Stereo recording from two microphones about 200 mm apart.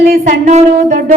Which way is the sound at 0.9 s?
45° right (ahead or behind).